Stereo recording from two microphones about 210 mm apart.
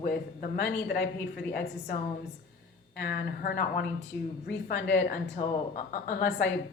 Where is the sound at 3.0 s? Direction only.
45° left (ahead or behind).